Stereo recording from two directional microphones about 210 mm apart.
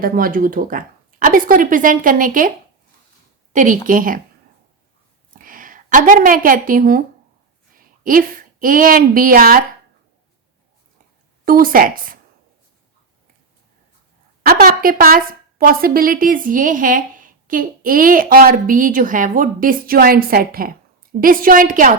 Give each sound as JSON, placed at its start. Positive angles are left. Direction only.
{"t": 0.0, "sound": "a woman's voice", "side_deg": -45}
{"t": 3.5, "sound": "a woman's voice", "side_deg": -40}
{"t": 5.3, "sound": "a woman's voice", "side_deg": -40}
{"t": 11.4, "sound": "speech", "side_deg": -45}
{"t": 14.4, "sound": "a woman's voice", "side_deg": -45}